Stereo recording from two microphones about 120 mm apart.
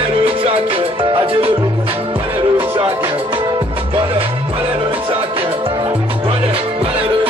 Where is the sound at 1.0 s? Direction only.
45° right (ahead or behind).